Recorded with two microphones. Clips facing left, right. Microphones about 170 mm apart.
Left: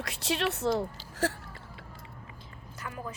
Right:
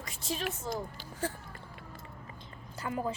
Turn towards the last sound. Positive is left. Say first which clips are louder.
# right 5 dB
turn(degrees=-25)  # may be behind; listen again after turning